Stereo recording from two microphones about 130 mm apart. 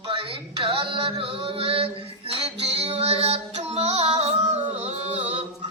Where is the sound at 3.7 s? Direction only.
55° right (ahead or behind).